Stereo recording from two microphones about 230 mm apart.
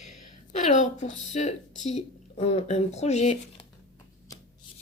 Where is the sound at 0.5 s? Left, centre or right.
Left.